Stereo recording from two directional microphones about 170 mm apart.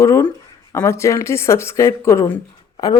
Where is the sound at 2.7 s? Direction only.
25° left (ahead or behind).